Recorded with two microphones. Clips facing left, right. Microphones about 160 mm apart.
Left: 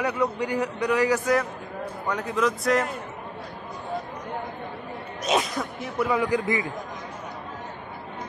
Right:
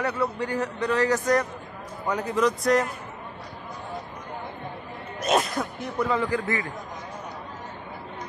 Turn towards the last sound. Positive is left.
turn(degrees=15)  # may be behind; listen again after turning